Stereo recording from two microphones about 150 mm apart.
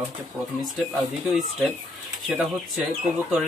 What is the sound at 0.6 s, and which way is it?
Speech, centre (ahead or behind).